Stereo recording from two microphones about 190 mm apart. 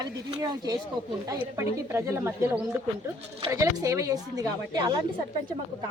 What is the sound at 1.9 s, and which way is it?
Speech, 15° right (ahead or behind).